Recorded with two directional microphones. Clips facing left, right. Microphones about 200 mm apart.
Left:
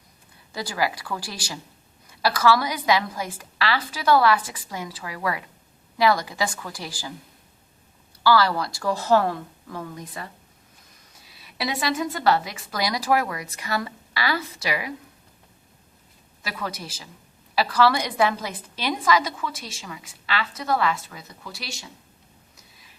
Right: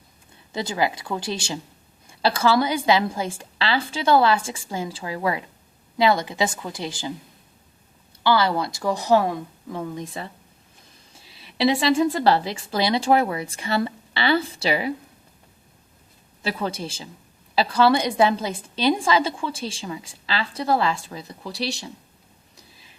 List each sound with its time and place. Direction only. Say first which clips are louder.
0.5 s a woman's voice: right 3 dB; 25° right (ahead or behind)
8.2 s a woman's voice: even; 20° right (ahead or behind)
16.4 s a woman's voice: right 6 dB; 30° right (ahead or behind)